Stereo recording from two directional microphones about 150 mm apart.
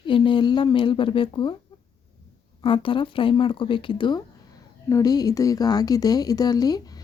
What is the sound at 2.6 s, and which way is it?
Speech, 35° left (ahead or behind).